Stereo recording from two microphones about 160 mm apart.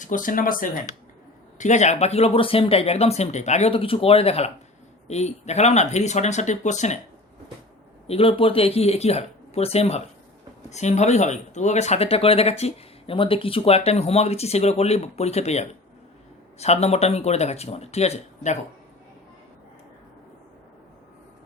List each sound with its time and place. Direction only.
0.0 s speech: 55° left (ahead or behind)
1.5 s speech: 45° left (ahead or behind)
8.0 s speech: 35° left (ahead or behind)